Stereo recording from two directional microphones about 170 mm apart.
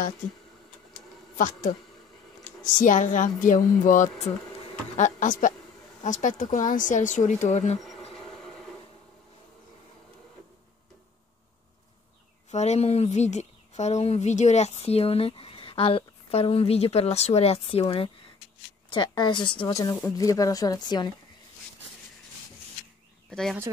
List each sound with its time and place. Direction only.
1.3 s speech: 45° left (ahead or behind)
8.1 s train: centre (ahead or behind)
12.4 s a woman's voice: 40° left (ahead or behind); by 21.1 s 25° left (ahead or behind)
23.3 s speech: centre (ahead or behind)